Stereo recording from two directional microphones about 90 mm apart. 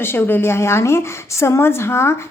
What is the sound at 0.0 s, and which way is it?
A woman's voice, 25° left (ahead or behind).